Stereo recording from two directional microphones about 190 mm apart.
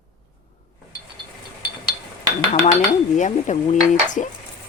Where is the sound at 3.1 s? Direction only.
40° left (ahead or behind).